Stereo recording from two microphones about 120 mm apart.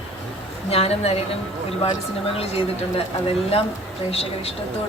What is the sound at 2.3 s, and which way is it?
Speech, 55° left (ahead or behind).